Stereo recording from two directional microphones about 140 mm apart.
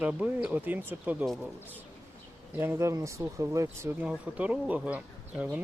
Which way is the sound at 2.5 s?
15° right (ahead or behind).